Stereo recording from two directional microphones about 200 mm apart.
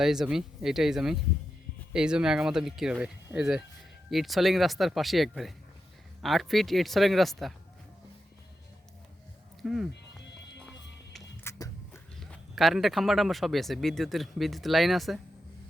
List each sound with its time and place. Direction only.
0.0 s speech: centre (ahead or behind)
9.6 s speech: centre (ahead or behind)
11.4 s a sound: 15° left (ahead or behind)
12.2 s speech: centre (ahead or behind)